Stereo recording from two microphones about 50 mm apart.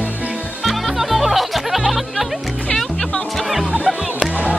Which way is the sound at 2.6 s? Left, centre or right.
Centre.